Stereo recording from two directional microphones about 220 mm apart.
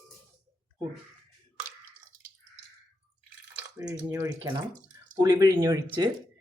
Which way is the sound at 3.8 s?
10° right (ahead or behind).